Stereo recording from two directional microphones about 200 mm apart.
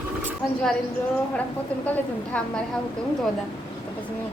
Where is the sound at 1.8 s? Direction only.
5° left (ahead or behind).